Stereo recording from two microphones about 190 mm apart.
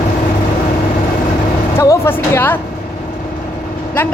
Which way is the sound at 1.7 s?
15° left (ahead or behind).